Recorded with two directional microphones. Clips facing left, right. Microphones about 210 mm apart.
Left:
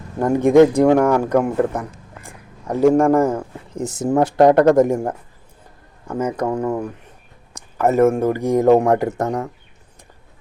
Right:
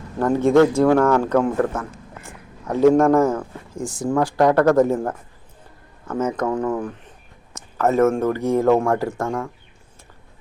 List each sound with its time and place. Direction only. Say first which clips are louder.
0.2 s a man's voice: left 3 dB; 15° left (ahead or behind)